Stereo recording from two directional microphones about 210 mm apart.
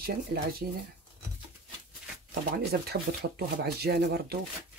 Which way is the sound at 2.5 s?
50° right (ahead or behind).